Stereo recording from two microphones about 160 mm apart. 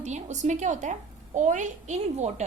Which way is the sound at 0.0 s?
50° right (ahead or behind).